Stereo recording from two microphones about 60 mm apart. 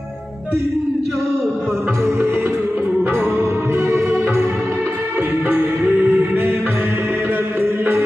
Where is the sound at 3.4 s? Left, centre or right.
Right.